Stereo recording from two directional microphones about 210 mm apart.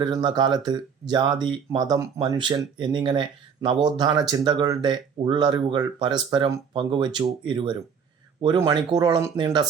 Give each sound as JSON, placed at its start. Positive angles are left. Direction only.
{"t": 0.0, "sound": "speech", "side_deg": -20}